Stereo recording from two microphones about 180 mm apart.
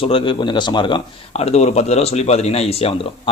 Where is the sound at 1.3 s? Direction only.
35° left (ahead or behind).